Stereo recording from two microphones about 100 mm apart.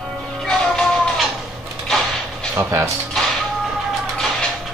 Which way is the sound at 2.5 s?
30° right (ahead or behind).